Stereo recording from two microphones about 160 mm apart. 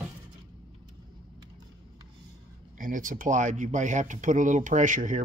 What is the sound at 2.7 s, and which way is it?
Speech, 55° right (ahead or behind).